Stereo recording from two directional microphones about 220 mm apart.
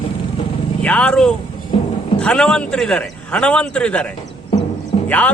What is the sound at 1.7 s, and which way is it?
Music, 25° left (ahead or behind).